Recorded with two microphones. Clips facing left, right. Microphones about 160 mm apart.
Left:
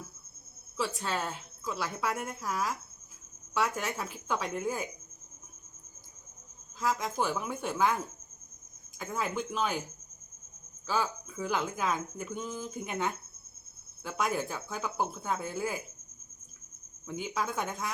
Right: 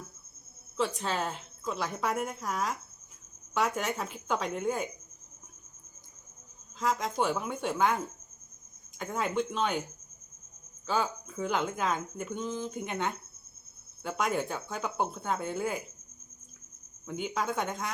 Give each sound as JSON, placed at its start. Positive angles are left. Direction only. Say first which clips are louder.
{"t": 0.8, "sound": "speech", "louder": "right 2 dB", "side_deg": 0}
{"t": 6.7, "sound": "speech", "louder": "right 1 dB", "side_deg": 0}
{"t": 9.0, "sound": "speech", "louder": "right 3 dB", "side_deg": 0}
{"t": 10.8, "sound": "speech", "louder": "right 1 dB", "side_deg": 0}
{"t": 17.1, "sound": "speech", "louder": "right 2 dB", "side_deg": 0}